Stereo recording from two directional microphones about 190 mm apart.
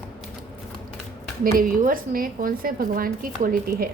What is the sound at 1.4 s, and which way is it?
A woman's voice, 50° right (ahead or behind).